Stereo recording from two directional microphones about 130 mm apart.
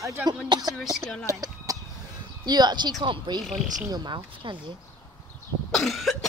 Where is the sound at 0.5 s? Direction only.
30° right (ahead or behind).